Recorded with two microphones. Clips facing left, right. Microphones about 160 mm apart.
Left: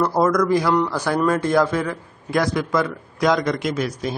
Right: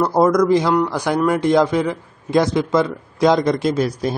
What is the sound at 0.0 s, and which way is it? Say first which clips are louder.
A man's voice: right 3 dB; 20° right (ahead or behind).